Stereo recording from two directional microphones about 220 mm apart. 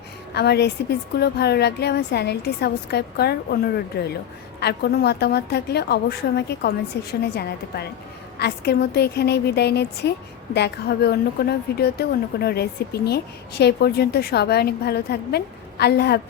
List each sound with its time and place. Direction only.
0.3 s a woman's voice: 50° left (ahead or behind)